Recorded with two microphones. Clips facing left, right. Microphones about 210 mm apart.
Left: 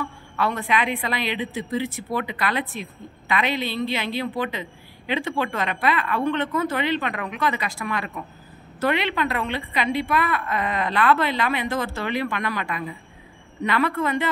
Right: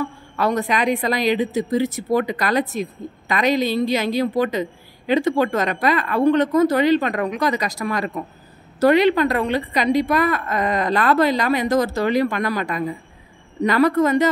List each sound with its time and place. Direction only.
0.0 s speech: 40° right (ahead or behind)